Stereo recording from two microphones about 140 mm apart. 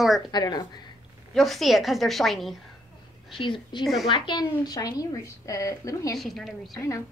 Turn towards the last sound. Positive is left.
turn(degrees=0)  # may be behind; listen again after turning